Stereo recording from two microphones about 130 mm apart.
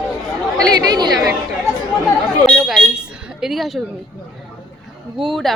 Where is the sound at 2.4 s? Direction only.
Centre (ahead or behind).